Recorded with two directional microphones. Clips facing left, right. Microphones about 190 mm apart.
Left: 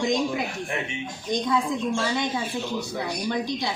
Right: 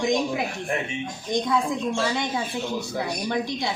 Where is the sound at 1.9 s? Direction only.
20° right (ahead or behind).